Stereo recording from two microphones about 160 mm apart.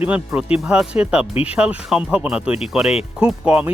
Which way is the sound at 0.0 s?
5° right (ahead or behind).